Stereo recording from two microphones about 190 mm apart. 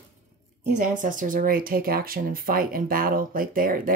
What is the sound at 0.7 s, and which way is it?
Speech, 45° right (ahead or behind).